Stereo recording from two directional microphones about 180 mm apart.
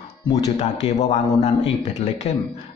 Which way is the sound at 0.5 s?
40° left (ahead or behind).